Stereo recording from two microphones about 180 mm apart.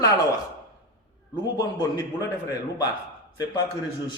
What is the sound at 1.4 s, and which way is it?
Speech, 20° left (ahead or behind).